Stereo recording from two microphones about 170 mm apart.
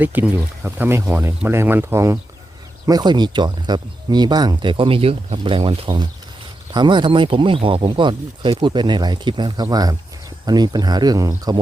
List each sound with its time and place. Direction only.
0.0 s speech: 10° right (ahead or behind)